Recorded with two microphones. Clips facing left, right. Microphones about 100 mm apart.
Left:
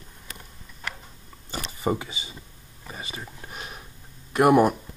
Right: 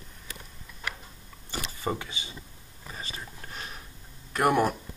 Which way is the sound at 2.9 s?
15° left (ahead or behind).